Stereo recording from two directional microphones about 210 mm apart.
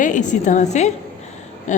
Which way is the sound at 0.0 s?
35° left (ahead or behind).